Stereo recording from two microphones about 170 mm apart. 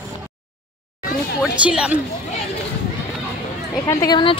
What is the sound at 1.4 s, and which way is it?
Speech, 5° right (ahead or behind).